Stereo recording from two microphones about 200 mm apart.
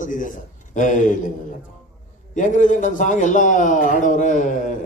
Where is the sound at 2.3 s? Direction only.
40° left (ahead or behind).